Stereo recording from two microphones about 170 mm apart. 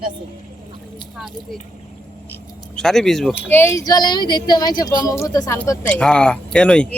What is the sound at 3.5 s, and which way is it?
Speech, 15° left (ahead or behind).